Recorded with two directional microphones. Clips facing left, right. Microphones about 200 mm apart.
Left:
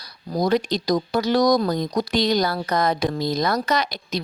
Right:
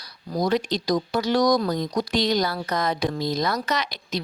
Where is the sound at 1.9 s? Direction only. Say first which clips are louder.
Left 2 dB; 45° left (ahead or behind).